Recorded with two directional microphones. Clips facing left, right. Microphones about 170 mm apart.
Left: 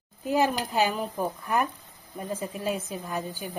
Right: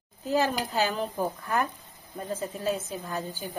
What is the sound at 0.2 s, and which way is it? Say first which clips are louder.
A woman's voice: left 1 dB; 15° left (ahead or behind).